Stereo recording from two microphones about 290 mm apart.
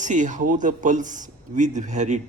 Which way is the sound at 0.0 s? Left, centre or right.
Right.